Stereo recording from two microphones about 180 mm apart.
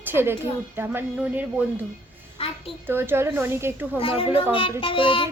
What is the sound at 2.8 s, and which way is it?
A woman's voice, 15° right (ahead or behind).